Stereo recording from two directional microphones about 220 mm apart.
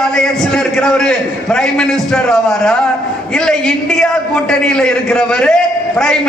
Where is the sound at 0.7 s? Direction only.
5° left (ahead or behind).